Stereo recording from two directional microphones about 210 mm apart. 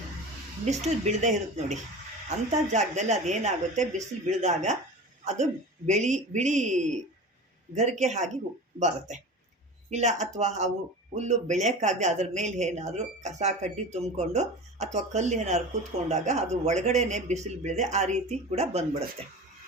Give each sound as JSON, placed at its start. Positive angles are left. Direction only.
{"t": 0.6, "sound": "speech", "side_deg": -30}